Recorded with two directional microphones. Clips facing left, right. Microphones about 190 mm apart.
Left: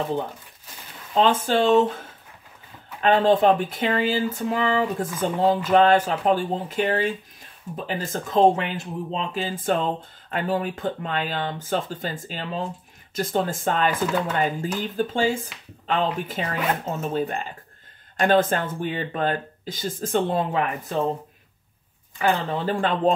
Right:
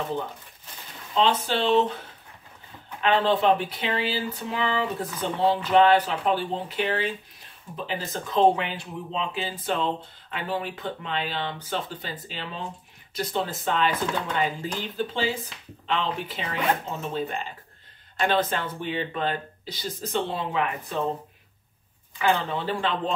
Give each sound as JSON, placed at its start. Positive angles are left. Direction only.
{"t": 1.1, "sound": "speech", "side_deg": 45}
{"t": 22.2, "sound": "speech", "side_deg": 45}